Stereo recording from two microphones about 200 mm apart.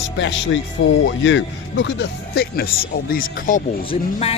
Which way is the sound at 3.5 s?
40° left (ahead or behind).